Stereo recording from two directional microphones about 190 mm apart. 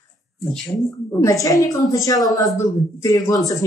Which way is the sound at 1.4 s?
15° left (ahead or behind).